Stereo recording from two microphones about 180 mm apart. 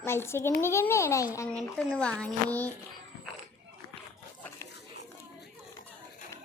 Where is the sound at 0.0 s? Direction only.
15° left (ahead or behind).